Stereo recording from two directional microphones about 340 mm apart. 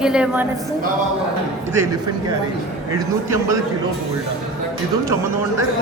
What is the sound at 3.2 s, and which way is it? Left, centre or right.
Speech, centre.